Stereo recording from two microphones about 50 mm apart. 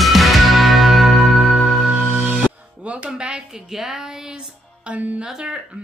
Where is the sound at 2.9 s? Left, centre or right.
Right.